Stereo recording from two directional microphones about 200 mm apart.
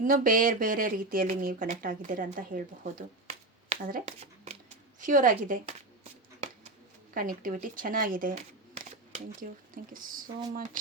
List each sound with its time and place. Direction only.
0.0 s speech: 40° right (ahead or behind)
3.2 s shuffling cards: 35° right (ahead or behind)
4.9 s speech: 40° right (ahead or behind)
8.7 s camera: 40° right (ahead or behind)